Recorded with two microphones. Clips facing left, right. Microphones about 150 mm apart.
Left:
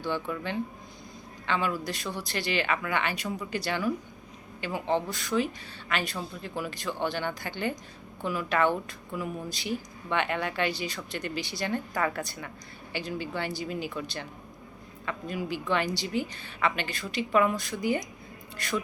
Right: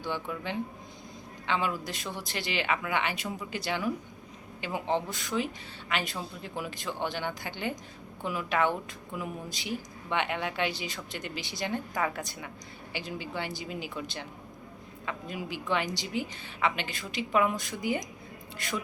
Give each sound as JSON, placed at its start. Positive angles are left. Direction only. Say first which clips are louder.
{"t": 0.0, "sound": "speech", "louder": "left 3 dB", "side_deg": -15}